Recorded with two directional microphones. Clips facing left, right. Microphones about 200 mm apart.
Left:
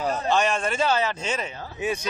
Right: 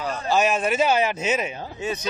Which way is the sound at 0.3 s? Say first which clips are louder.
Right 4 dB; 5° right (ahead or behind).